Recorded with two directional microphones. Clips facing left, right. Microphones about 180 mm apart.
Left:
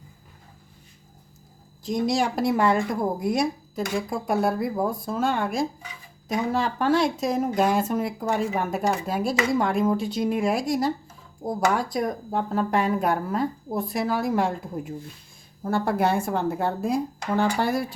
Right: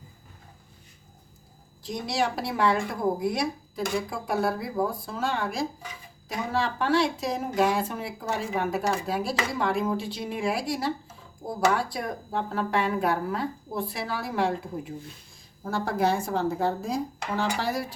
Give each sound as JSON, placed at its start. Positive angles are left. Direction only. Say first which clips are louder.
{"t": 1.8, "sound": "speech", "louder": "left 5 dB", "side_deg": 45}
{"t": 15.7, "sound": "speech", "louder": "left 3 dB", "side_deg": 55}